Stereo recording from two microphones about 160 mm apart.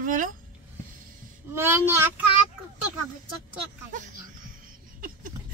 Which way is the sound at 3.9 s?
50° right (ahead or behind).